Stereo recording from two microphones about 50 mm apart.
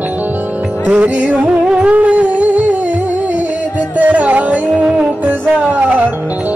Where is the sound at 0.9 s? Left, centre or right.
Right.